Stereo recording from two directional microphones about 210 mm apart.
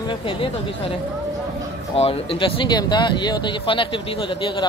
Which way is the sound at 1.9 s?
30° left (ahead or behind).